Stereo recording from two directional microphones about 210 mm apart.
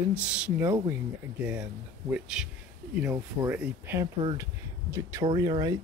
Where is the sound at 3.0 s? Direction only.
10° right (ahead or behind).